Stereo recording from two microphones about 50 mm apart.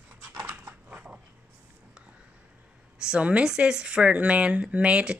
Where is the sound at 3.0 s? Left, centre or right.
Centre.